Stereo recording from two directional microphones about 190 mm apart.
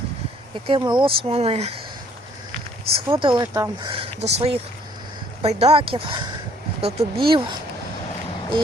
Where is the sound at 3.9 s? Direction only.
35° right (ahead or behind).